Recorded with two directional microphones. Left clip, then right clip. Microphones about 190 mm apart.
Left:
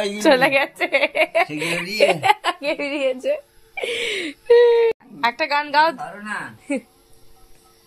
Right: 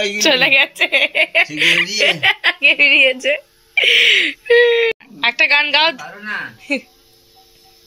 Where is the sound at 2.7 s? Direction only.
5° right (ahead or behind).